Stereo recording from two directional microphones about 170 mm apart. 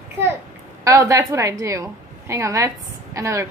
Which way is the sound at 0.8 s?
20° right (ahead or behind).